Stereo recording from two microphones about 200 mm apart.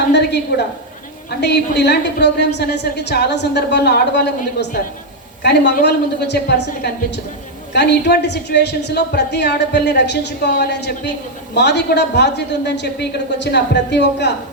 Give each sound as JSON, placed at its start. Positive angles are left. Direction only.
{"t": 0.1, "sound": "a woman's voice", "side_deg": 55}
{"t": 5.4, "sound": "a woman's voice", "side_deg": 55}
{"t": 7.7, "sound": "a woman's voice", "side_deg": 55}